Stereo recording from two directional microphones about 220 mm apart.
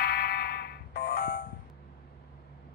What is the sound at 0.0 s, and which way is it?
Fire alarm, 45° left (ahead or behind).